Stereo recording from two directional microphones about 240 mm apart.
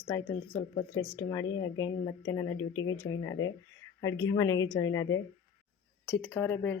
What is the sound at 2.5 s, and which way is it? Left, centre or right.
Speech, left.